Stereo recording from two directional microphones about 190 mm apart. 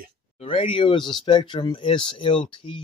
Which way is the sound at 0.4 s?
30° left (ahead or behind).